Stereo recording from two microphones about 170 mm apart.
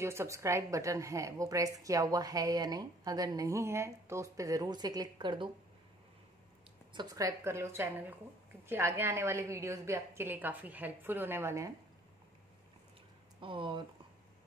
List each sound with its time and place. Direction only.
0.0 s a woman's voice: 15° right (ahead or behind)
6.9 s a woman's voice: 20° right (ahead or behind)
13.4 s a woman's voice: 30° right (ahead or behind)